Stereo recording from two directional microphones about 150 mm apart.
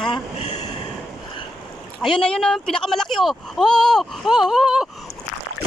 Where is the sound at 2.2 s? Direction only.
5° left (ahead or behind).